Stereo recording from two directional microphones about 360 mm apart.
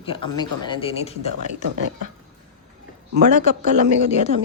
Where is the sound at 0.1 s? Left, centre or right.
Centre.